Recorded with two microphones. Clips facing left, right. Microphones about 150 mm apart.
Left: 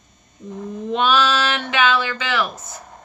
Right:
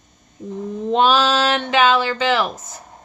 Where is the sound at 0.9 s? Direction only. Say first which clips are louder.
Right 2 dB; 35° right (ahead or behind).